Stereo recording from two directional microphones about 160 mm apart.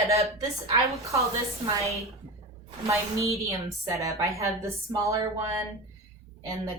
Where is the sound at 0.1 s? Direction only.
40° right (ahead or behind).